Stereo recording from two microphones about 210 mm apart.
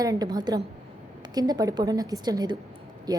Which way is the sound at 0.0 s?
15° right (ahead or behind).